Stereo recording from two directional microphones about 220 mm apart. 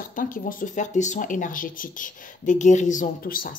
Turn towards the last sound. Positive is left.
turn(degrees=40)  # may be behind; listen again after turning